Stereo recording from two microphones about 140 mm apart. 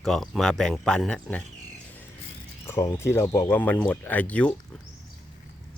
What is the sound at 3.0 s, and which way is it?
Speech, 20° left (ahead or behind).